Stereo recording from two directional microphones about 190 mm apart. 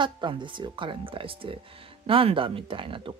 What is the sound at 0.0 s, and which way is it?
Speech, 25° right (ahead or behind).